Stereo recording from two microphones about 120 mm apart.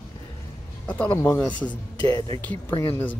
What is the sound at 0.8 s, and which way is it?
Speech, 15° left (ahead or behind).